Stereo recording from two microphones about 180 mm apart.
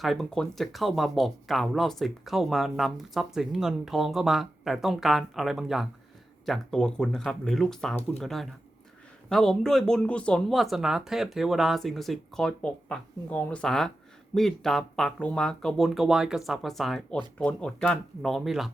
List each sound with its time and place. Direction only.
0.0 s speech: centre (ahead or behind)